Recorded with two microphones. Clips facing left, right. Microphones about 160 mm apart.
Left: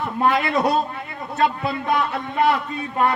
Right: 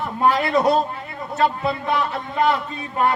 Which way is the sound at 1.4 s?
30° right (ahead or behind).